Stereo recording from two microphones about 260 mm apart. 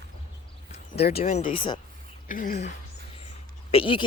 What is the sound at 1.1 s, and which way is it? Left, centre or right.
Speech, left.